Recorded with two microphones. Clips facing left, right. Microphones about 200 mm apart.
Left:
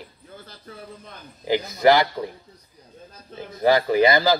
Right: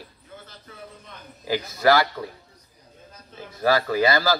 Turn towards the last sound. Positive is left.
turn(degrees=20)  # may be behind; listen again after turning